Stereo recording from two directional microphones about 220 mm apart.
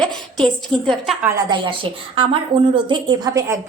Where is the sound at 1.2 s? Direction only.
15° right (ahead or behind).